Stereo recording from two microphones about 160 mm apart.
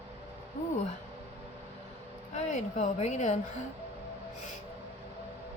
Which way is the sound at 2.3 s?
50° left (ahead or behind).